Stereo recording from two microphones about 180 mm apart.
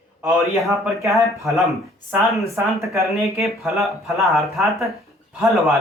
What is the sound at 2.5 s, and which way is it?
Speech, 15° right (ahead or behind).